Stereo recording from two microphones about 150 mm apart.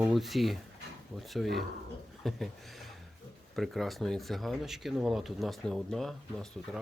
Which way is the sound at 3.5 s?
Centre (ahead or behind).